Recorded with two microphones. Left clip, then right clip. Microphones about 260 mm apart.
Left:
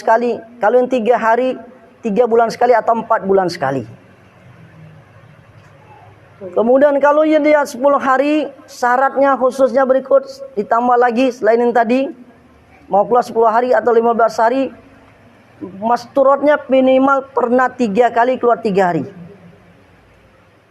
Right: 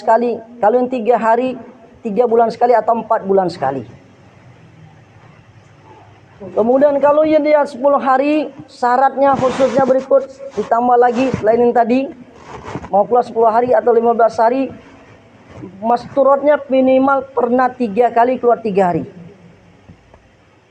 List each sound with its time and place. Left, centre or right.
0.0 s a man's voice: left
6.6 s a man's voice: left
15.8 s a man's voice: left